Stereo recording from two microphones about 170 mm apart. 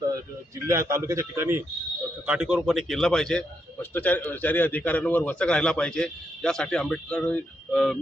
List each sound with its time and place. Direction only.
0.7 s a man's voice: 15° right (ahead or behind); by 7.9 s 5° left (ahead or behind)